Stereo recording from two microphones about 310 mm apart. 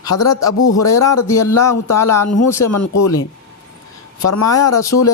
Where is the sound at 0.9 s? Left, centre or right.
Centre.